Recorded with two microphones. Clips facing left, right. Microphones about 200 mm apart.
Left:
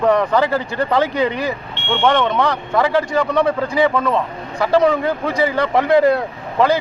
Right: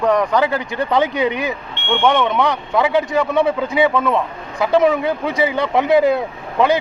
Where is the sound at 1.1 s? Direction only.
20° right (ahead or behind).